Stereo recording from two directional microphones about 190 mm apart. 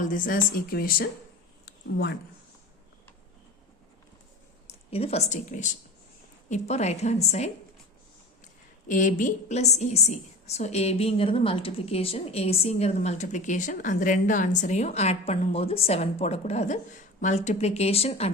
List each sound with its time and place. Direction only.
0.0 s speech: 45° left (ahead or behind)
1.6 s a sound: 60° left (ahead or behind)
4.9 s a woman's voice: 30° left (ahead or behind)
8.9 s a woman's voice: 45° left (ahead or behind)